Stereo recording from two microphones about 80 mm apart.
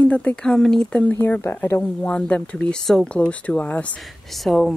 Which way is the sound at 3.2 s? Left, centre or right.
Centre.